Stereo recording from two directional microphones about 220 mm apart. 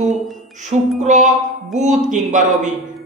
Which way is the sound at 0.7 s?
35° right (ahead or behind).